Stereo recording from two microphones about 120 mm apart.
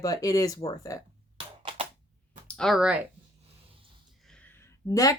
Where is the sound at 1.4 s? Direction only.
50° right (ahead or behind).